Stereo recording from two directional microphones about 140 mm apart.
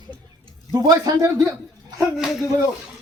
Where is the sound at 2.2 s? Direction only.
Centre (ahead or behind).